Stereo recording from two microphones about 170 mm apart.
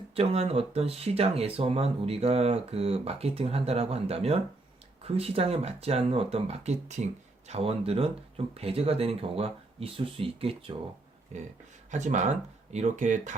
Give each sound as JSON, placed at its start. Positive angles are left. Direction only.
{"t": 0.1, "sound": "speech", "side_deg": -35}
{"t": 11.9, "sound": "speech", "side_deg": -45}